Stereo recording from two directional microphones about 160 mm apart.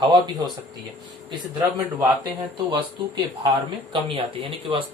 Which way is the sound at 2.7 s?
30° right (ahead or behind).